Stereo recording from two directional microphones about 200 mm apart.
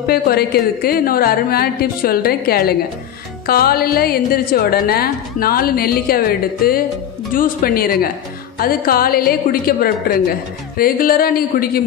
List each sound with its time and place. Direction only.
0.0 s speech: 50° left (ahead or behind)